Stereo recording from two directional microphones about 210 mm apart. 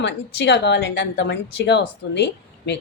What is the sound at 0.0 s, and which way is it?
Speech, 55° left (ahead or behind).